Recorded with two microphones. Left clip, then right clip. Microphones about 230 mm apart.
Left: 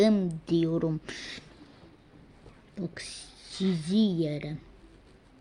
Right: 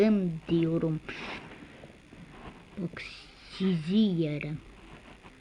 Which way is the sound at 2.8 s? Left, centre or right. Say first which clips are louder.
Left 1 dB; centre.